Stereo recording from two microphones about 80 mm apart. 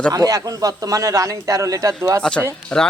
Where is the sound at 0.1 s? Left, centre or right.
Right.